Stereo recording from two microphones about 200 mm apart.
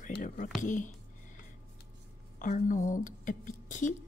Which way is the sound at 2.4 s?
40° left (ahead or behind).